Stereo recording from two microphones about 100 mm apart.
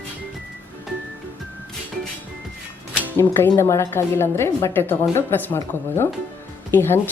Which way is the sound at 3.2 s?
20° left (ahead or behind).